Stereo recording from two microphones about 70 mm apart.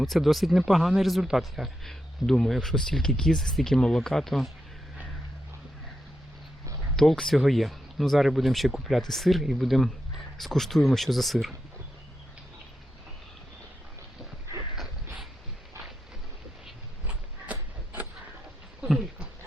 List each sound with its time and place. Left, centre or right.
0.0 s speech: centre
6.9 s speech: centre
17.1 s a sound: right